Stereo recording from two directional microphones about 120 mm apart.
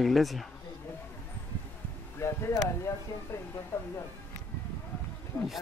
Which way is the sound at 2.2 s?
25° left (ahead or behind).